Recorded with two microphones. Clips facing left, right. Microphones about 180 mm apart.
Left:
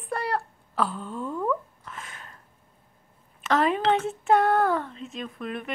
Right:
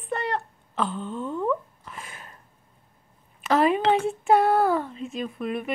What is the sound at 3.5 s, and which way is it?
A woman's voice, 5° right (ahead or behind).